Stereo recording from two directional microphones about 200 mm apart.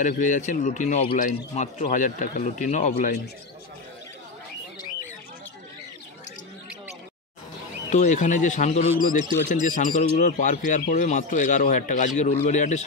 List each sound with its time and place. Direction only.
0.0 s a man's voice: 40° left (ahead or behind)
7.9 s a man's voice: 40° left (ahead or behind)